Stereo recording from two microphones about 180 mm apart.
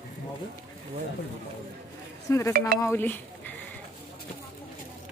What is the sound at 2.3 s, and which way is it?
Stir, 15° left (ahead or behind).